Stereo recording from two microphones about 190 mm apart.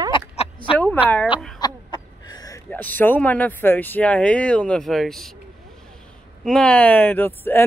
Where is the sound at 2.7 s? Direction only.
10° left (ahead or behind).